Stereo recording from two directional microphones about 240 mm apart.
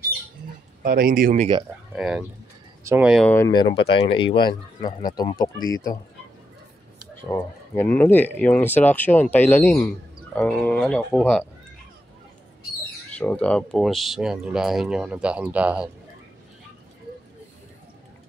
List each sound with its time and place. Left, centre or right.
0.8 s speech: right
2.0 s speech: centre
3.3 s speech: centre
7.2 s speech: centre
13.2 s speech: centre